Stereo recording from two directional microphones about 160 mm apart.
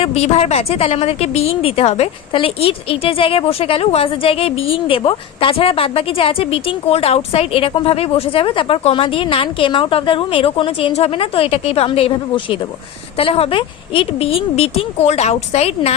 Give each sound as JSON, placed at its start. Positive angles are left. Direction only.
{"t": 0.0, "sound": "a woman's voice", "side_deg": 40}